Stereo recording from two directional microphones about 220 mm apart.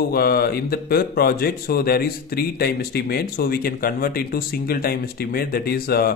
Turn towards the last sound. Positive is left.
turn(degrees=45)  # may be behind; listen again after turning